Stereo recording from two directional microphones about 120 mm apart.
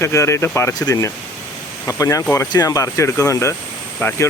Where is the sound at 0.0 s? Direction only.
25° left (ahead or behind).